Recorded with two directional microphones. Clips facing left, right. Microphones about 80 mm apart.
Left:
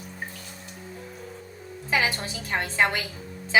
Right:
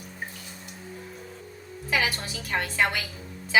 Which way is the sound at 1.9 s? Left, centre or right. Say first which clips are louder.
Left 2 dB; left.